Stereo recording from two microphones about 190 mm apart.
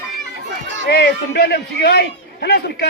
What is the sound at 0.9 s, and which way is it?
A man's voice, 60° left (ahead or behind).